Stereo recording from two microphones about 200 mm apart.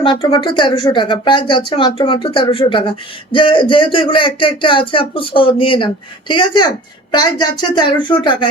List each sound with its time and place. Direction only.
0.0 s speech: 25° left (ahead or behind)